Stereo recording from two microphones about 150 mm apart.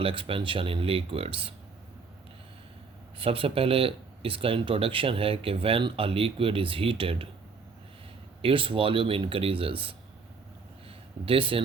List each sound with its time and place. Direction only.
0.0 s speech: 35° right (ahead or behind)
3.2 s speech: 40° right (ahead or behind)
8.4 s speech: 35° right (ahead or behind)
10.8 s a sound: 35° right (ahead or behind)